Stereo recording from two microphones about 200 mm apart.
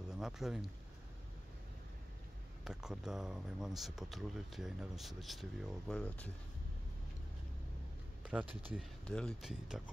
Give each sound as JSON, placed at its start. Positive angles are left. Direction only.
{"t": 0.1, "sound": "speech", "side_deg": -5}
{"t": 2.6, "sound": "speech", "side_deg": -5}
{"t": 8.2, "sound": "a sound", "side_deg": -5}
{"t": 8.7, "sound": "speech", "side_deg": 5}